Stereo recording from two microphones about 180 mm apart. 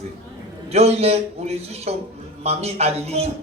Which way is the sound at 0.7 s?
35° right (ahead or behind).